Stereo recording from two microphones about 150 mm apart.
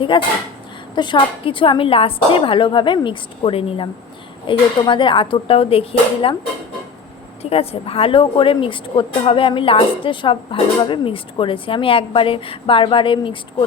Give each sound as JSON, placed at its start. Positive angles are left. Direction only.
{"t": 0.1, "sound": "speech", "side_deg": 35}
{"t": 7.5, "sound": "speech", "side_deg": 40}